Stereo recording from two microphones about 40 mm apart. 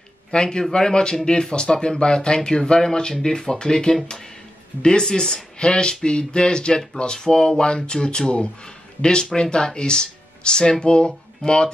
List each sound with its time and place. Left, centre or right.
0.3 s speech: centre
5.6 s speech: left